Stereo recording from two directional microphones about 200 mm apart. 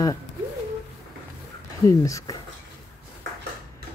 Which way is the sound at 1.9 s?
15° left (ahead or behind).